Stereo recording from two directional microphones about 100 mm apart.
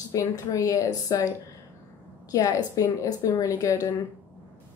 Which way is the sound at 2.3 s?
40° left (ahead or behind).